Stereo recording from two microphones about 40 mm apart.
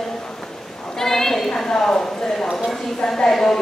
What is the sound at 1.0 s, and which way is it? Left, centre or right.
A woman's voice, centre.